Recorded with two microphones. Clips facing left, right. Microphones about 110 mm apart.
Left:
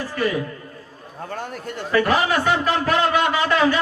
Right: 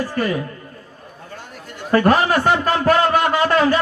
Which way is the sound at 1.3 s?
50° left (ahead or behind).